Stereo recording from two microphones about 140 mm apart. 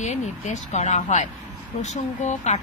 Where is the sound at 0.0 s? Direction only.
60° left (ahead or behind).